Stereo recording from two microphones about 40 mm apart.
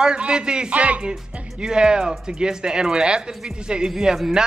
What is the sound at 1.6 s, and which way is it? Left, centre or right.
A man's voice, centre.